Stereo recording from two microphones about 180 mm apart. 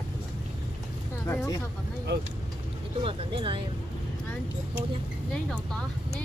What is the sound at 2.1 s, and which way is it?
Speech, 70° right (ahead or behind).